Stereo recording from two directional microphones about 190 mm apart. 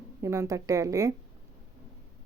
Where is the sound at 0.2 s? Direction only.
15° right (ahead or behind).